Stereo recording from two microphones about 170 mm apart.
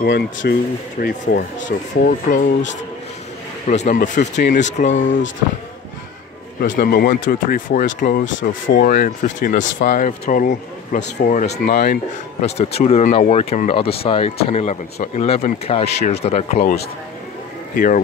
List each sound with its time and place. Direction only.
0.0 s speech: 80° left
2.0 s speech: 50° left (ahead or behind)
3.6 s speech: 45° left (ahead or behind)
6.6 s speech: 60° left (ahead or behind)
8.4 s speech: 80° left; by 10.1 s 50° left (ahead or behind)
10.2 s speech: 65° left (ahead or behind)
11.1 s speech: 45° left (ahead or behind)
11.5 s speech: 75° left (ahead or behind)
12.4 s speech: 40° left (ahead or behind)
17.7 s speech: 55° left (ahead or behind)